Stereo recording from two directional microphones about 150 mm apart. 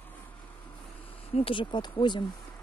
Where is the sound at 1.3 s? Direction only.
40° left (ahead or behind).